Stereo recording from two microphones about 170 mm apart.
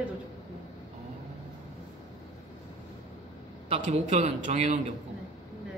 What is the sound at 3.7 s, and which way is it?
A man's voice, 40° right (ahead or behind).